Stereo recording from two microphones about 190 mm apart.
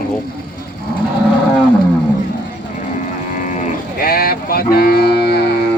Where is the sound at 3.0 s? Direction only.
40° left (ahead or behind); by 5.4 s 60° left (ahead or behind).